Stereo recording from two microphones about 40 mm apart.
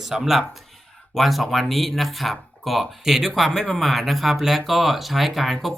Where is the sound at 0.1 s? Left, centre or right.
Centre.